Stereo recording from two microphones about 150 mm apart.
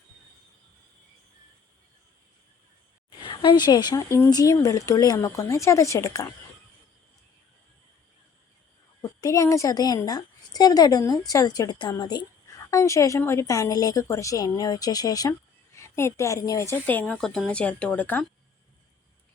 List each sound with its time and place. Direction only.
3.1 s a woman's voice: 30° left (ahead or behind)
9.0 s a woman's voice: 25° left (ahead or behind)